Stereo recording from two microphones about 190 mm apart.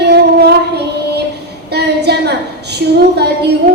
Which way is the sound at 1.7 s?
60° right (ahead or behind).